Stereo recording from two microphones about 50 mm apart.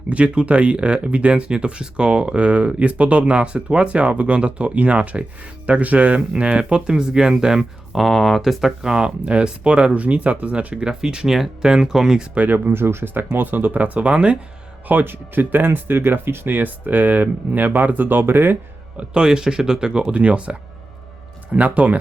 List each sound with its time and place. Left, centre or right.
0.1 s speech: right
7.6 s speech: centre
8.4 s speech: centre; by 10.8 s right
10.8 s speech: centre
12.3 s speech: right
14.8 s speech: right
18.9 s speech: centre